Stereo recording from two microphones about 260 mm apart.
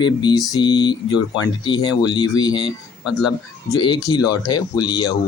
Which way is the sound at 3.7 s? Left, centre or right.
Centre.